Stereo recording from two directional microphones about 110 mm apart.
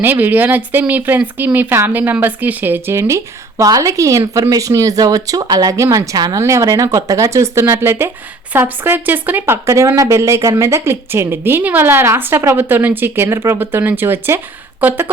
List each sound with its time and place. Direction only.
0.0 s speech: 15° right (ahead or behind)